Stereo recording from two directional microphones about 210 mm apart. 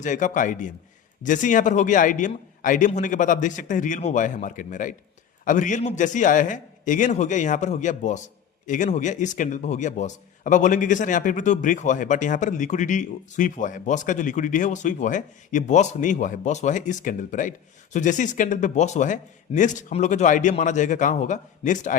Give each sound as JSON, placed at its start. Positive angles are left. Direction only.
{"t": 0.0, "sound": "a man's voice", "side_deg": 35}